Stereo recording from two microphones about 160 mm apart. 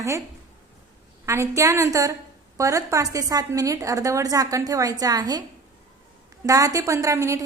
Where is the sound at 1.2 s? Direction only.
20° right (ahead or behind).